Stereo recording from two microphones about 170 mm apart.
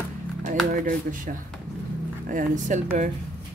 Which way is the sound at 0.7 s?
55° right (ahead or behind).